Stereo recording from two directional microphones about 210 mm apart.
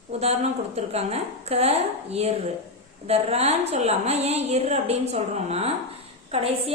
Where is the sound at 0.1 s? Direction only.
30° right (ahead or behind).